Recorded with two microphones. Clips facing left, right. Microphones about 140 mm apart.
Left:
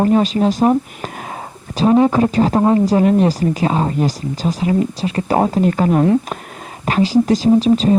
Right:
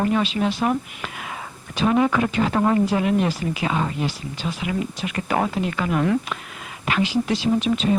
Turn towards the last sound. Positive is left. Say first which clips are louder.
# left 8 dB
turn(degrees=35)  # may be behind; listen again after turning